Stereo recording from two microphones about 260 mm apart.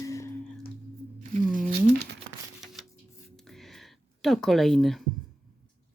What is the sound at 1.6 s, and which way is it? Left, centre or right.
Crumpling, right.